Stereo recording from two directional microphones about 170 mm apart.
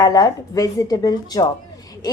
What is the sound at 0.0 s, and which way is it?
A woman's voice, 20° left (ahead or behind).